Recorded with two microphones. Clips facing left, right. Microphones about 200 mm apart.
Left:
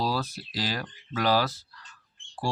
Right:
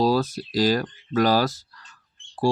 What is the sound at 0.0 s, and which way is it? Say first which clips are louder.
Speech: right 9 dB; 45° right (ahead or behind).